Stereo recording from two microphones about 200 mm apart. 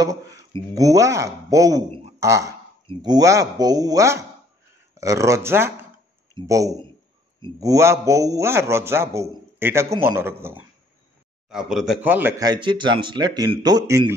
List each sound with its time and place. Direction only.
0.0 s a man's voice: 15° right (ahead or behind)